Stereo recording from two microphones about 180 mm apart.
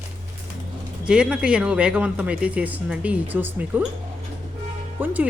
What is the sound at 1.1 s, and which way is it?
Speech, 5° right (ahead or behind).